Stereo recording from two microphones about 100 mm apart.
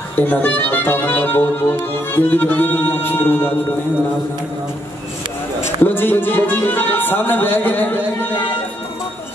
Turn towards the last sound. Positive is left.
turn(degrees=20)  # may be behind; listen again after turning